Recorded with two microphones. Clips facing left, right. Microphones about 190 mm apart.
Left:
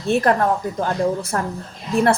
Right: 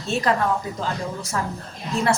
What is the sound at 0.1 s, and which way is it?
A woman's voice, 55° left (ahead or behind).